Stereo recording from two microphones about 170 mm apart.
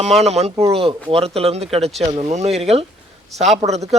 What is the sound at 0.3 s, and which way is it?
Speech, 40° right (ahead or behind).